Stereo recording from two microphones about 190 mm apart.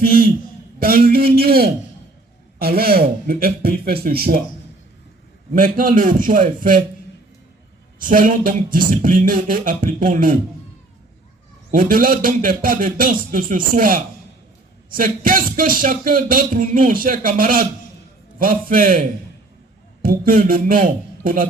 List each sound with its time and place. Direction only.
0.0 s speech: 50° right (ahead or behind)
5.5 s speech: 45° right (ahead or behind)
8.0 s speech: 45° right (ahead or behind)
11.7 s speech: 45° right (ahead or behind)